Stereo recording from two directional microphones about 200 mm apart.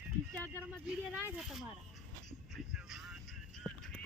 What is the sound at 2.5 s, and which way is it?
Music, centre (ahead or behind).